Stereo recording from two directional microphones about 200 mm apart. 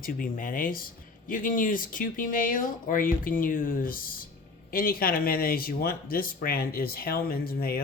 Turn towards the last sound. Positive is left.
turn(degrees=50)  # may be behind; listen again after turning